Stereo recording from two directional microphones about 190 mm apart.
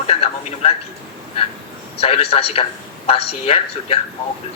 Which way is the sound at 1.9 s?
30° left (ahead or behind).